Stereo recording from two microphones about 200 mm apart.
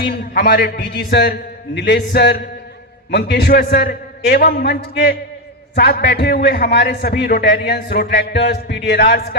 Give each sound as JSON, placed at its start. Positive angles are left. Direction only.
{"t": 0.0, "sound": "a man's voice", "side_deg": 55}